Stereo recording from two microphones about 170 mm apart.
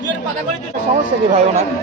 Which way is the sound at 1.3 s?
40° right (ahead or behind).